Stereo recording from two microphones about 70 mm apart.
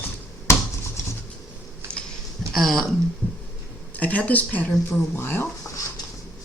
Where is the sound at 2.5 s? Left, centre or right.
Centre.